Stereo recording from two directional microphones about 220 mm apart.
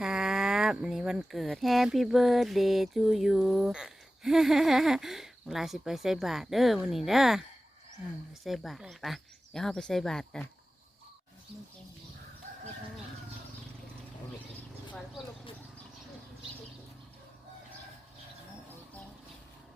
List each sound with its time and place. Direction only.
0.0 s speech: 5° right (ahead or behind)
8.4 s speech: centre (ahead or behind)